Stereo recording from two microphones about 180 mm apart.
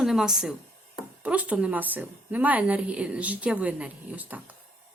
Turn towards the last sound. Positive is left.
turn(degrees=-10)  # may be behind; listen again after turning